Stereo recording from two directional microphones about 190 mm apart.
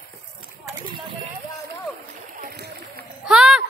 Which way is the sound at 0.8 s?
25° right (ahead or behind).